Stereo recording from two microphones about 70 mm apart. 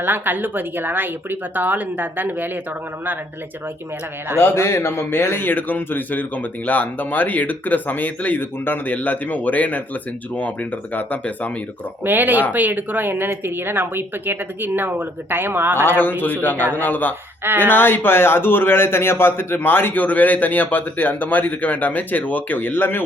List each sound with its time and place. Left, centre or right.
0.0 s speech: right
4.4 s a man's voice: left
12.0 s speech: right
15.9 s a man's voice: left